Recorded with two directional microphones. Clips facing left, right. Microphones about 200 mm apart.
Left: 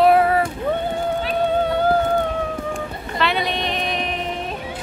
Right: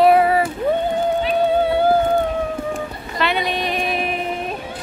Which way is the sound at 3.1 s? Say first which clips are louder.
Right 1 dB; centre (ahead or behind).